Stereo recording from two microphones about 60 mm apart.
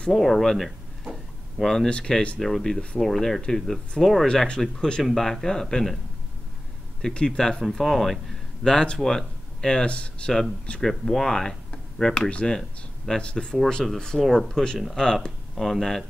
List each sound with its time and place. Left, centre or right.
0.1 s speech: centre
1.9 s speech: centre
7.0 s speech: centre
8.6 s speech: centre
10.8 s speech: centre
12.5 s speech: centre
14.2 s speech: centre
14.5 s speech: centre
15.5 s speech: centre